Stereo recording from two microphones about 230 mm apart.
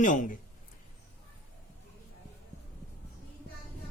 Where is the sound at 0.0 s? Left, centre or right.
Left.